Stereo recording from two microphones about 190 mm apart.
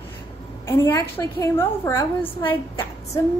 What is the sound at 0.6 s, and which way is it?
A woman's voice, 15° left (ahead or behind).